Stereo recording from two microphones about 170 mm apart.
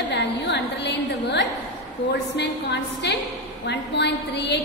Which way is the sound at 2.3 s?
90° left.